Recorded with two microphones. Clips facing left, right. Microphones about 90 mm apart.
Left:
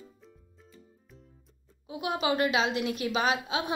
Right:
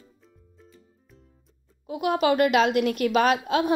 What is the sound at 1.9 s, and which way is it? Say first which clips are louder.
A woman's voice: right 7 dB; 50° right (ahead or behind).